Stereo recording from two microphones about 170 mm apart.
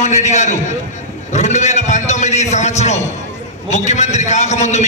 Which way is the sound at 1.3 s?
45° left (ahead or behind).